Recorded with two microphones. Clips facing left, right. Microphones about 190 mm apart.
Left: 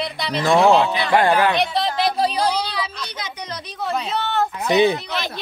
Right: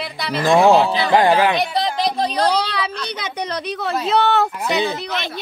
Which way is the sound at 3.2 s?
65° right (ahead or behind).